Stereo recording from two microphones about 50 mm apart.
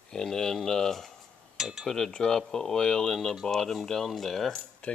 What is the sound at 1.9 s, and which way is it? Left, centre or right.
Speech, centre.